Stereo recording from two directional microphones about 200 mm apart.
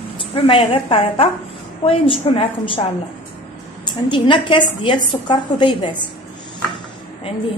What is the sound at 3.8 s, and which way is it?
A woman's voice, 25° left (ahead or behind).